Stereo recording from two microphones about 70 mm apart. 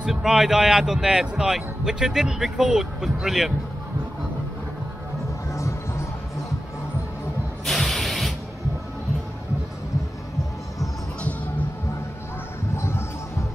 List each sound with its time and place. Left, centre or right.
0.0 s a man's voice: centre
5.5 s music: left
7.6 s spray: centre
12.7 s a sound: left